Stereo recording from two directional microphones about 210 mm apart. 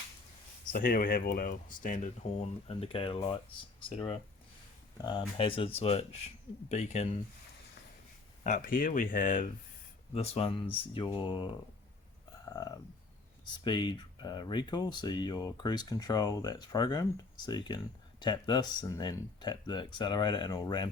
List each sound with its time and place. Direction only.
0.7 s speech: 45° left (ahead or behind)
8.4 s speech: 40° left (ahead or behind); by 11.5 s 25° left (ahead or behind)
12.5 s a sound: 20° left (ahead or behind)
13.7 s speech: 20° left (ahead or behind)